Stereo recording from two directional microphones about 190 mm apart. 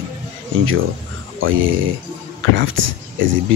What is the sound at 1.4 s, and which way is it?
Speech, 90° right.